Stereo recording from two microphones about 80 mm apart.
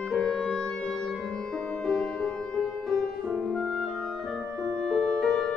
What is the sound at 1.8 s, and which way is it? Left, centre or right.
Music, centre.